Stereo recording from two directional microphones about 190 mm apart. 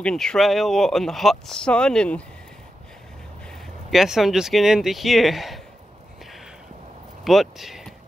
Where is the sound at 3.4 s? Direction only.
Centre (ahead or behind).